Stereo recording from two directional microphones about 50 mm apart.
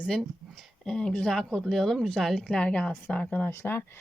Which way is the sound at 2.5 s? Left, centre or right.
Left.